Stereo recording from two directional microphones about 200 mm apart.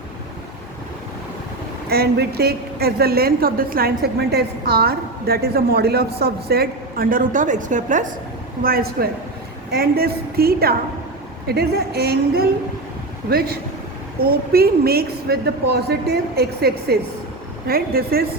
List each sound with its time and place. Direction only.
1.9 s a woman's voice: 50° right (ahead or behind)
14.2 s a woman's voice: 50° right (ahead or behind)